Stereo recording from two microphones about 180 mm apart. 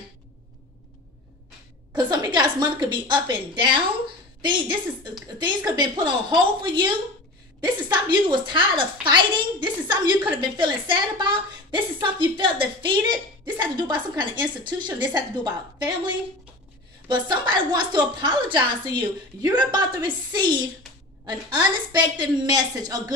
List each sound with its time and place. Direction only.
1.9 s a woman's voice: 20° right (ahead or behind)
7.9 s a woman's voice: 25° right (ahead or behind)
17.1 s a woman's voice: 25° right (ahead or behind)